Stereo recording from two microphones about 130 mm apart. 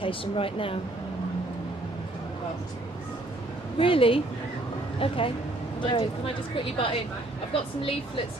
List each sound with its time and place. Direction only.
0.0 s speech: 45° left (ahead or behind)
3.8 s speech: 45° left (ahead or behind)